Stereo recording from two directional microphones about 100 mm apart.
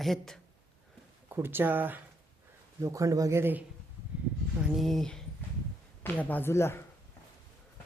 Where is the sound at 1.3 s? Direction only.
20° right (ahead or behind).